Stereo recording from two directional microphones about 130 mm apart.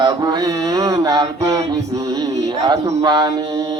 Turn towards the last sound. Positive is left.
turn(degrees=-35)  # may be behind; listen again after turning